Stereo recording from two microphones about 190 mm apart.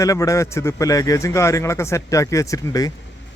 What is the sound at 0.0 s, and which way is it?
A man's voice, 15° left (ahead or behind).